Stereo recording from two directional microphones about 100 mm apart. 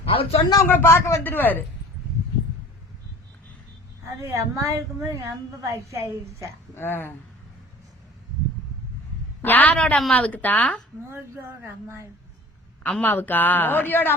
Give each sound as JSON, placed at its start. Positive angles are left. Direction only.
{"t": 0.0, "sound": "speech", "side_deg": 70}
{"t": 0.7, "sound": "a man's voice", "side_deg": 20}
{"t": 4.0, "sound": "a woman's voice", "side_deg": -30}
{"t": 6.7, "sound": "a man's voice", "side_deg": 20}
{"t": 9.4, "sound": "speech", "side_deg": 15}
{"t": 11.1, "sound": "a woman's voice", "side_deg": -25}
{"t": 12.8, "sound": "a man's voice", "side_deg": 15}